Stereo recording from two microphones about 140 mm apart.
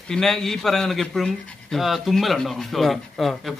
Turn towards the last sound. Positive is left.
turn(degrees=5)  # may be behind; listen again after turning